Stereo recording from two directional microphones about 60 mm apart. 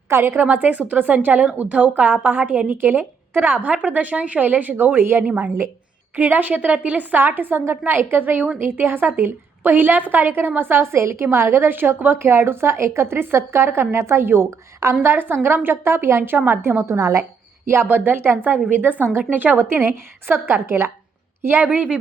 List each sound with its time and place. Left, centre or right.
0.1 s a woman's voice: right
5.2 s a woman's voice: right
17.8 s a woman's voice: right
21.6 s a woman's voice: right